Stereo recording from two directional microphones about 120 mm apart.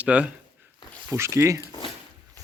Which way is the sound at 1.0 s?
20° right (ahead or behind).